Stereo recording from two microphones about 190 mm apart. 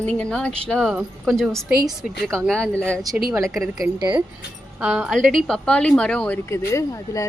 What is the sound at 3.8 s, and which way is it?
Speech, 25° right (ahead or behind).